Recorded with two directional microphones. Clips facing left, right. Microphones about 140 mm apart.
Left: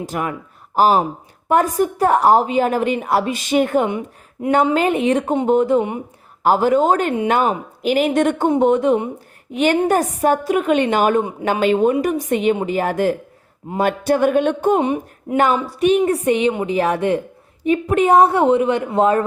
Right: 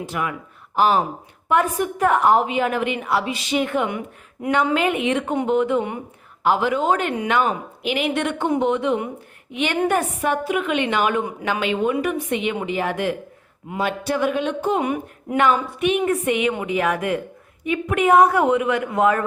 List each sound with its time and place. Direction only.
0.0 s a woman's voice: 40° left (ahead or behind)
14.8 s a woman's voice: 25° left (ahead or behind)